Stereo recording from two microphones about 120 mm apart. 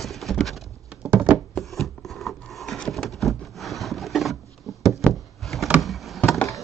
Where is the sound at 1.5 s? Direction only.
Centre (ahead or behind).